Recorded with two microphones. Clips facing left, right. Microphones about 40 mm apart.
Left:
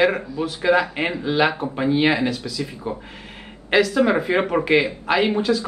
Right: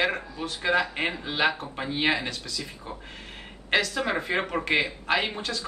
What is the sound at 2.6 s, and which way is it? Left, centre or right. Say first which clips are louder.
Speech: left 10 dB; left.